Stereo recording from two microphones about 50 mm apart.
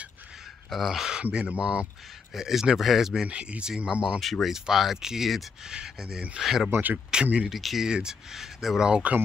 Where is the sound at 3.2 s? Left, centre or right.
Right.